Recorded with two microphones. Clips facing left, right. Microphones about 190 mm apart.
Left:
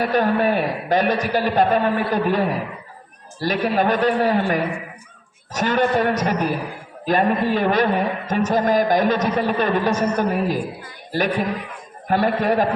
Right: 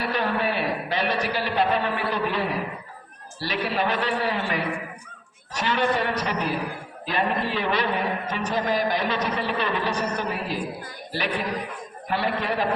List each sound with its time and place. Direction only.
0.0 s a man's voice: 45° left (ahead or behind)
12.0 s a man's voice: 45° left (ahead or behind)